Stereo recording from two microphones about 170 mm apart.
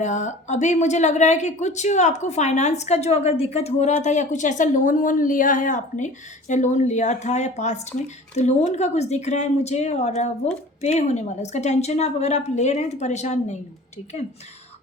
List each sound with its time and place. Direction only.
0.0 s speech: 45° left (ahead or behind)